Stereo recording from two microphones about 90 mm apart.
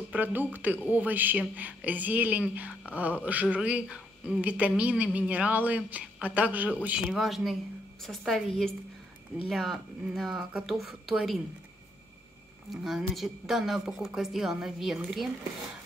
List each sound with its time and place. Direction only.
0.1 s a woman's voice: 20° right (ahead or behind)
7.1 s a woman's voice: centre (ahead or behind)
12.6 s a woman's voice: centre (ahead or behind)